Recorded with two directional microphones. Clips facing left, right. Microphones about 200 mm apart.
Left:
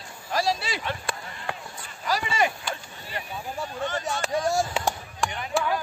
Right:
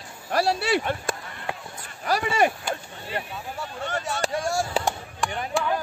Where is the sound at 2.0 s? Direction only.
55° right (ahead or behind).